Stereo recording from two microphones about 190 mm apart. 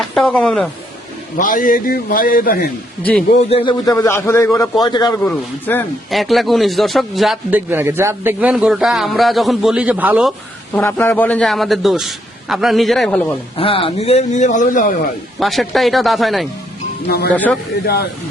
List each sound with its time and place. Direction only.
0.0 s speech: 5° left (ahead or behind)
1.4 s a man's voice: 45° left (ahead or behind)
3.0 s a man's voice: 10° left (ahead or behind)
3.5 s a man's voice: 25° left (ahead or behind)
5.2 s speech: 10° left (ahead or behind)
10.8 s speech: 10° left (ahead or behind)
13.6 s a man's voice: 30° left (ahead or behind); by 15.0 s 45° left (ahead or behind)
15.4 s a man's voice: centre (ahead or behind)